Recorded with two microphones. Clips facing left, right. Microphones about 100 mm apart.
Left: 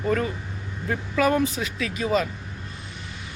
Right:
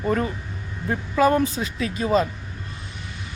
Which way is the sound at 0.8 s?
25° right (ahead or behind).